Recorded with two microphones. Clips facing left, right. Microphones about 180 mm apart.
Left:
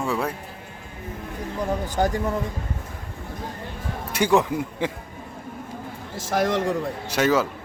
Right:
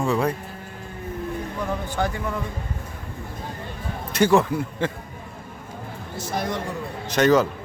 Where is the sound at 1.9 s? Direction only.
40° left (ahead or behind).